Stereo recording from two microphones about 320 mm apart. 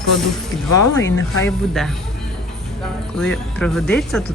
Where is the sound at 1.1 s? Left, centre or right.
Left.